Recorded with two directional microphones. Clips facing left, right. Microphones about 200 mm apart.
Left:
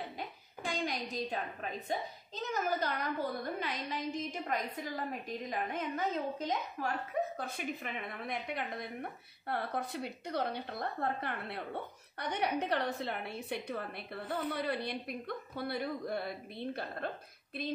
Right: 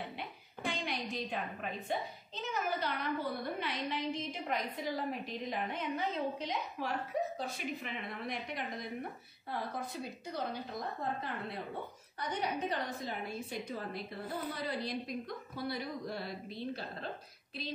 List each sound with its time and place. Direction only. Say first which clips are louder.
0.7 s a woman's voice: left 1 dB; 40° left (ahead or behind); by 17.1 s 55° left (ahead or behind)